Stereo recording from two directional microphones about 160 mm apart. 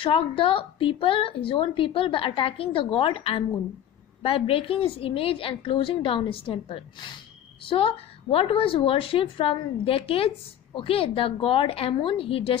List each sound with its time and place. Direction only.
0.0 s speech: 35° left (ahead or behind)